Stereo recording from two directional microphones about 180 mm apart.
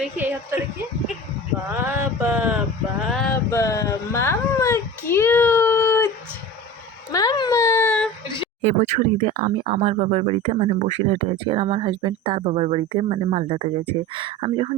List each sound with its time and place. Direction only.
0.0 s a woman's voice: 10° right (ahead or behind)
1.7 s mantra: 10° right (ahead or behind)
3.1 s male singing: centre (ahead or behind)
3.3 s a sound: 15° left (ahead or behind)
7.1 s baby cry: 20° left (ahead or behind)
8.6 s speech: 40° right (ahead or behind)